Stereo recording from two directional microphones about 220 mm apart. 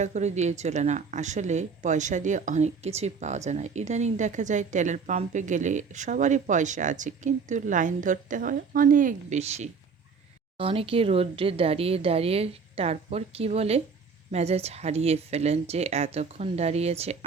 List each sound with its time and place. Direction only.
0.0 s speech: 30° right (ahead or behind)